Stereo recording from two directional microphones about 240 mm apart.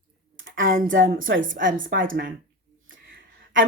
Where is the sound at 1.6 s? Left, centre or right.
Right.